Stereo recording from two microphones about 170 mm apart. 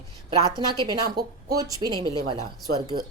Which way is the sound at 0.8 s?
25° right (ahead or behind).